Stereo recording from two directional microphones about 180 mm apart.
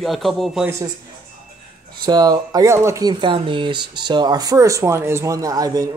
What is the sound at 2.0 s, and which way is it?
Speech, 20° right (ahead or behind).